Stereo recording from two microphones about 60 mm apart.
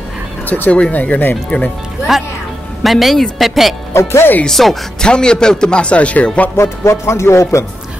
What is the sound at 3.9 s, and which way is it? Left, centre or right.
Speech, left.